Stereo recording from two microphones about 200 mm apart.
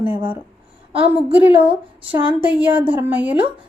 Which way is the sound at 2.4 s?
5° right (ahead or behind).